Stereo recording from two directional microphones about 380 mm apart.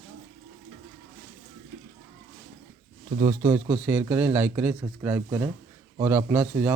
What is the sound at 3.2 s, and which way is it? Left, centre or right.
A man's voice, centre.